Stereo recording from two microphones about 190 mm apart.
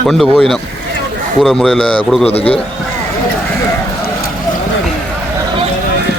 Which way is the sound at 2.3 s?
30° left (ahead or behind).